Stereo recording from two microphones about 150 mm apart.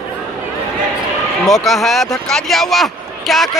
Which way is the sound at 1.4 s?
Centre (ahead or behind).